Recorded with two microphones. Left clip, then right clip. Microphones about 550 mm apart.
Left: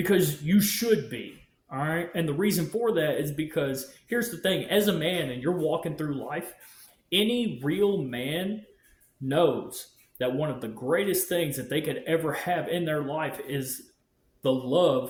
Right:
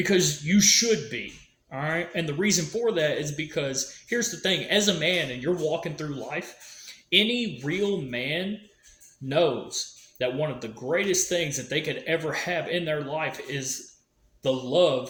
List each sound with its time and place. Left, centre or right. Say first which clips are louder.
0.1 s speech: left 1 dB; left